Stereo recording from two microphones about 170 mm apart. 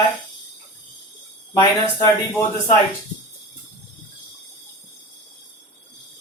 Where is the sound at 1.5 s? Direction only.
20° left (ahead or behind).